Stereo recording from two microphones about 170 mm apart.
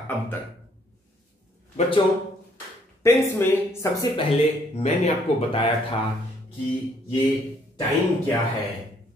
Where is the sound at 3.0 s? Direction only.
15° left (ahead or behind).